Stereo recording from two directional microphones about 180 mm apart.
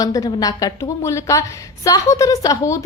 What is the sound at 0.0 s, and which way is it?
A woman's voice, 20° left (ahead or behind).